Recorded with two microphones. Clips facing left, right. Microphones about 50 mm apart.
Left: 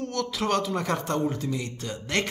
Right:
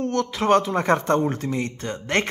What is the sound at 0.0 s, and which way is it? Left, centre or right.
Speech, right.